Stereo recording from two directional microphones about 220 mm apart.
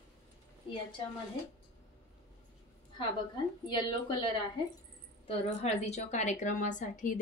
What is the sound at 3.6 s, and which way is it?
A woman's voice, 20° left (ahead or behind).